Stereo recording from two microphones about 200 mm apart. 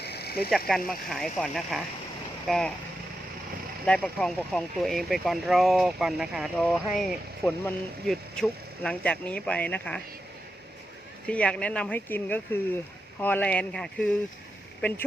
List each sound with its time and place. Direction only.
0.0 s a sound: 55° left (ahead or behind)
0.9 s speech: centre (ahead or behind)
3.8 s speech: 5° left (ahead or behind)
11.3 s speech: 5° left (ahead or behind)